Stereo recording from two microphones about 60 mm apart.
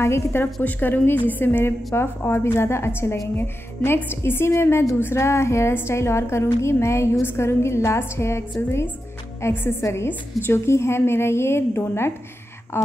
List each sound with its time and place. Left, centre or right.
0.0 s a woman's voice: left